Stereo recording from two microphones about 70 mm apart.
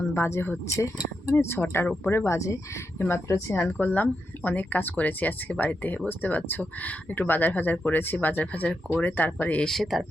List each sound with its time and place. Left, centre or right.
0.1 s speech: left
9.6 s speech: centre